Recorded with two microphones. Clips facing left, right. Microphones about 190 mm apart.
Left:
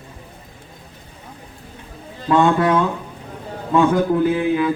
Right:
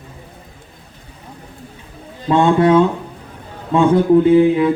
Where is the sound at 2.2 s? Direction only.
25° right (ahead or behind).